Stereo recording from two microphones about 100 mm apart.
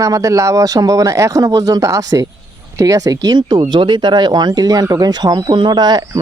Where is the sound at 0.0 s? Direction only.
35° right (ahead or behind).